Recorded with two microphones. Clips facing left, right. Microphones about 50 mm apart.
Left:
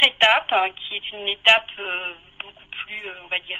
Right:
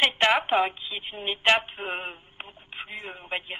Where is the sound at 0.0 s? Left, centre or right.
Left.